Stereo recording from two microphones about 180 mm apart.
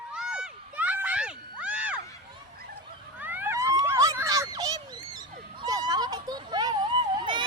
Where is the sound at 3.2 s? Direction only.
10° right (ahead or behind).